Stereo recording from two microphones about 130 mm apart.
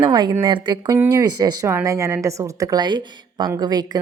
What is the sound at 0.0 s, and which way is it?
Speech, 35° right (ahead or behind).